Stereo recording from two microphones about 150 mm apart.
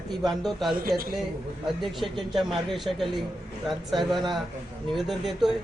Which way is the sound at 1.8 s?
Centre (ahead or behind).